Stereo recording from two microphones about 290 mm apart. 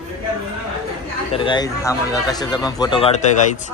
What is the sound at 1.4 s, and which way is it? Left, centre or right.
Speech, centre.